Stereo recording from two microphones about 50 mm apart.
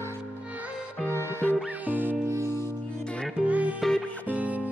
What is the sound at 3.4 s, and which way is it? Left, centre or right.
Music, right.